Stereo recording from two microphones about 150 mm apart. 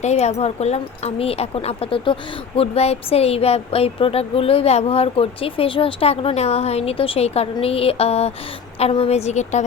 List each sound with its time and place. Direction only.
0.0 s a woman's voice: 45° left (ahead or behind)